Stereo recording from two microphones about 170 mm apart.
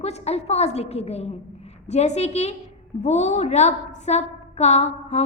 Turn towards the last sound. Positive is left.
turn(degrees=40)  # may be behind; listen again after turning